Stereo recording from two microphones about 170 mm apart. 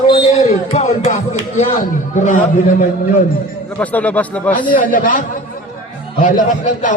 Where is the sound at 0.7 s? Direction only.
40° left (ahead or behind).